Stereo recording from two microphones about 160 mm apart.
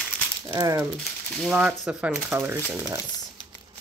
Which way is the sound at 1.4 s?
5° right (ahead or behind).